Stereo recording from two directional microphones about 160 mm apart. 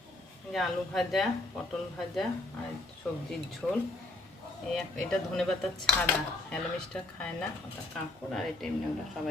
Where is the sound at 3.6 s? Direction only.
5° left (ahead or behind).